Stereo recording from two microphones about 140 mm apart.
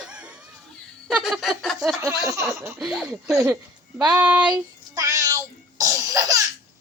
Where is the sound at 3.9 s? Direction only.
10° right (ahead or behind).